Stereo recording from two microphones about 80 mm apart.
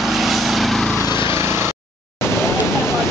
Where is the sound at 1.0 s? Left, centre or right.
Right.